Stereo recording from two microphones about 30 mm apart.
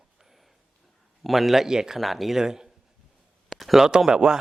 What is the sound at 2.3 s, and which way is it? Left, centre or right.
Speech, centre.